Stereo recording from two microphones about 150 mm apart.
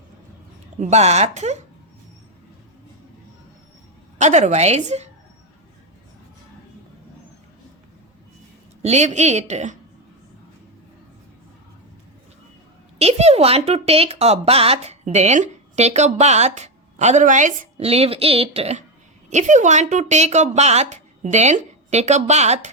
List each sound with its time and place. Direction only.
0.8 s a woman's voice: 50° right (ahead or behind)
4.2 s a woman's voice: 50° right (ahead or behind)
8.8 s a woman's voice: 50° right (ahead or behind)
13.0 s a woman's voice: 45° right (ahead or behind)
19.3 s a woman's voice: 55° right (ahead or behind)